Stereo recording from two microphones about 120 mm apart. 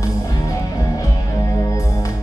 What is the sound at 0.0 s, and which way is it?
Music, 30° left (ahead or behind).